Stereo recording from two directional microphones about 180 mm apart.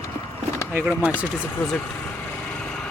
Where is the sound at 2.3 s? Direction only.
5° left (ahead or behind).